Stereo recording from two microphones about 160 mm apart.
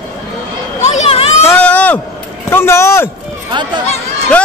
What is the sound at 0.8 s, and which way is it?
Children playing, 40° left (ahead or behind).